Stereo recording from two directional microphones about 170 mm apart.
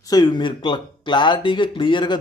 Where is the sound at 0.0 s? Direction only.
25° left (ahead or behind).